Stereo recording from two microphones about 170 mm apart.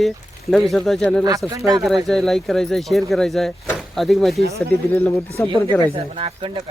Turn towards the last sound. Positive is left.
turn(degrees=-30)  # may be behind; listen again after turning